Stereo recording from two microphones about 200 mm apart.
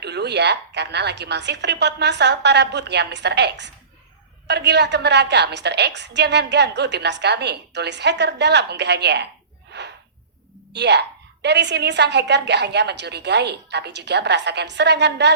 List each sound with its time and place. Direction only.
0.0 s a woman's voice: 55° right (ahead or behind)
10.7 s a woman's voice: 60° right (ahead or behind)